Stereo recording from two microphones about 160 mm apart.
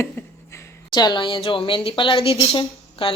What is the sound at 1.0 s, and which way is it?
Speech, 30° left (ahead or behind).